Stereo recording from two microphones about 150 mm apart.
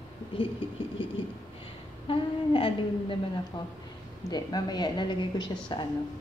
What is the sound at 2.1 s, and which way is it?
A woman's voice, 35° left (ahead or behind).